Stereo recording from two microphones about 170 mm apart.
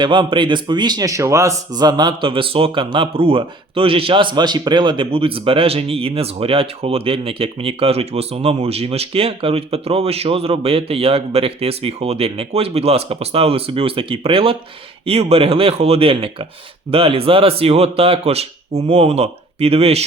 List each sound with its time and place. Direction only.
0.0 s a man's voice: 30° right (ahead or behind)